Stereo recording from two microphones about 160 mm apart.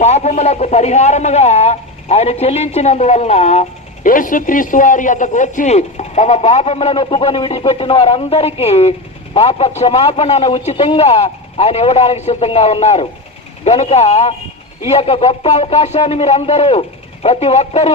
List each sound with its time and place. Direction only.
0.0 s a man's voice: 45° left (ahead or behind)